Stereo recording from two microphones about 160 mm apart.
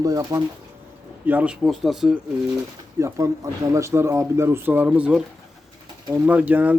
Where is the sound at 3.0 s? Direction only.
20° right (ahead or behind).